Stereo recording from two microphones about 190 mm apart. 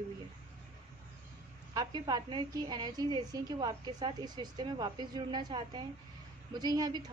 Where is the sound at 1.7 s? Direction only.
20° right (ahead or behind).